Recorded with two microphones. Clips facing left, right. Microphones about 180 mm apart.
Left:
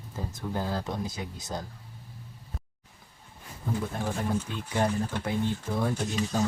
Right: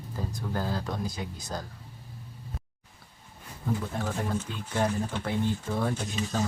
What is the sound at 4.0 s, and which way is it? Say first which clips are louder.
Speech: left 1 dB; 10° left (ahead or behind).